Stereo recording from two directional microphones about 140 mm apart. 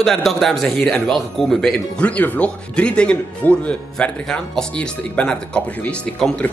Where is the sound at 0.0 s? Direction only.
Centre (ahead or behind).